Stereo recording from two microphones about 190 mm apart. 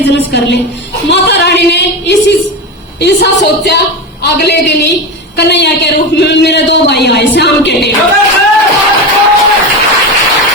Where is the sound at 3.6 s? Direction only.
60° left (ahead or behind).